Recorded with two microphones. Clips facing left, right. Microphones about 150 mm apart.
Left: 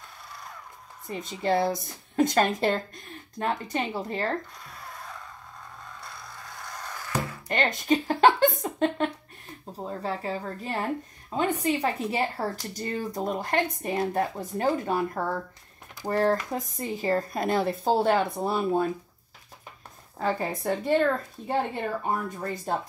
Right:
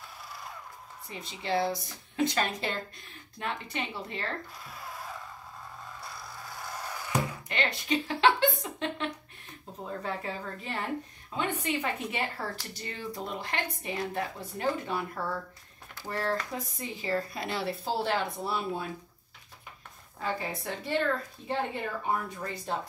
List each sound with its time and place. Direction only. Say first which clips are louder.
1.0 s speech: left 9 dB; 45° left (ahead or behind)
4.6 s a sound: right 1 dB; centre (ahead or behind)
5.9 s music: even; centre (ahead or behind)
7.4 s speech: left 6 dB; 45° left (ahead or behind)
9.8 s speech: left 3 dB; 35° left (ahead or behind)
20.2 s speech: left 6 dB; 45° left (ahead or behind)